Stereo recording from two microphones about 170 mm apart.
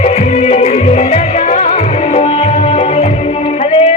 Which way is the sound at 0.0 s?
40° left (ahead or behind).